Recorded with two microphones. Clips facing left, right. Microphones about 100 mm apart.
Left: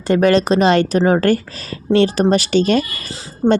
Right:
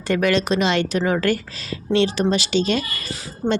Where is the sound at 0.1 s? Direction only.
35° left (ahead or behind).